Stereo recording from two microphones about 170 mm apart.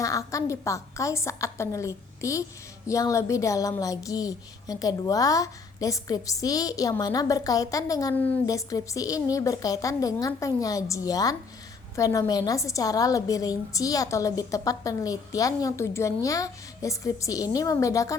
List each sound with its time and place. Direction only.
0.0 s a woman's voice: 20° left (ahead or behind)